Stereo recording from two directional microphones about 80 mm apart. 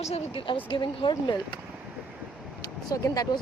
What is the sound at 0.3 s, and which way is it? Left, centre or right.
Speech, left.